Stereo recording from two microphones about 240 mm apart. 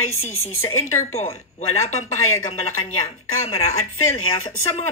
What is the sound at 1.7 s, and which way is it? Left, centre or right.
Speech, left.